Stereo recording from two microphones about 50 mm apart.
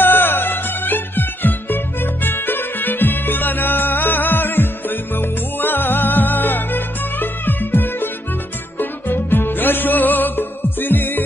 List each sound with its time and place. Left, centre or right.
0.0 s music: left